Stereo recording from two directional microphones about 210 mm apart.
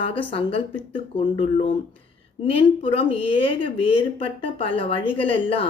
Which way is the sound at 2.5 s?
25° left (ahead or behind).